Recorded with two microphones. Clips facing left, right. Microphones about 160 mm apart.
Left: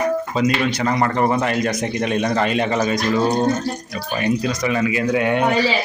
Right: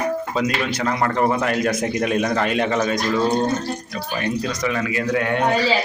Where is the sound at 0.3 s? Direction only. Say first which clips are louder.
Left 3 dB; centre (ahead or behind).